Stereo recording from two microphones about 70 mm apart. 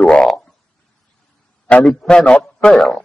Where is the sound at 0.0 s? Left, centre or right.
Centre.